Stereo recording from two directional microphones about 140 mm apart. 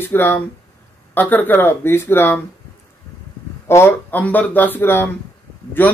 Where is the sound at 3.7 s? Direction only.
15° left (ahead or behind).